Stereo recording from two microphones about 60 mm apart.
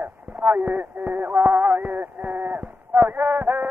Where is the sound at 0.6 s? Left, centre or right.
Right.